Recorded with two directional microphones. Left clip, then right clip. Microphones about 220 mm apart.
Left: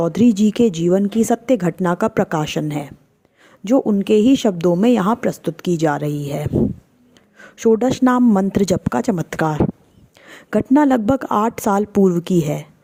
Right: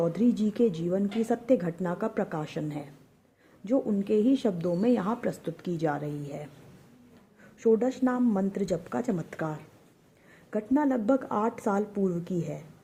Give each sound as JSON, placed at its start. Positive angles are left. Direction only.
{"t": 0.0, "sound": "a woman's voice", "side_deg": 40}